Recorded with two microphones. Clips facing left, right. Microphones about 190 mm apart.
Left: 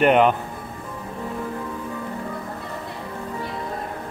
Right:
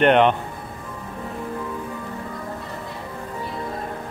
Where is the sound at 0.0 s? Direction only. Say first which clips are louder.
Even; 5° left (ahead or behind).